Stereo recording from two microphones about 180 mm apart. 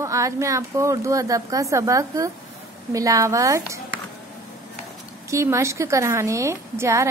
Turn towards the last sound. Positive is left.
turn(degrees=-15)  # may be behind; listen again after turning